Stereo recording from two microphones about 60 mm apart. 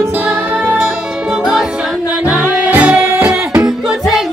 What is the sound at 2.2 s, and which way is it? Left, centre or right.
Music, right.